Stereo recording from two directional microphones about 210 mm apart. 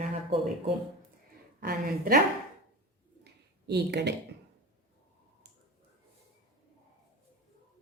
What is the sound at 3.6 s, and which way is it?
Speech, 50° right (ahead or behind).